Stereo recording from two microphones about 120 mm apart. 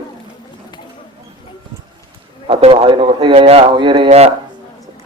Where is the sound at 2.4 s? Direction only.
50° right (ahead or behind).